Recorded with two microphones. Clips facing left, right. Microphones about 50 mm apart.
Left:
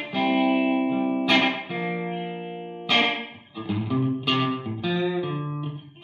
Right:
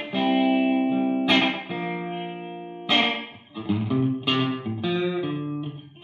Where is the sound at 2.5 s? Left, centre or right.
Right.